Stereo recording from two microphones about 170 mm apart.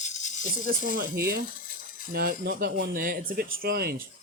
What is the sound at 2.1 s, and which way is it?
Speech, 65° right (ahead or behind).